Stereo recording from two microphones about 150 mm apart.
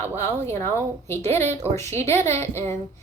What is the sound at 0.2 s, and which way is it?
A woman's voice, 15° left (ahead or behind).